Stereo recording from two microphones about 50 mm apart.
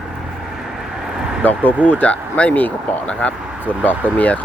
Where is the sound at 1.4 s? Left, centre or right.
Left.